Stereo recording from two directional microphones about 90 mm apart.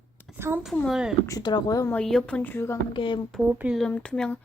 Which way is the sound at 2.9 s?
65° left (ahead or behind).